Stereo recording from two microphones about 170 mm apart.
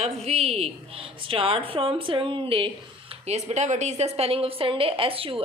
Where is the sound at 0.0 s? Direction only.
40° right (ahead or behind).